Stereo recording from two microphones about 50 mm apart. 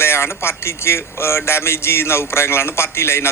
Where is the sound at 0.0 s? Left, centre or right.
Left.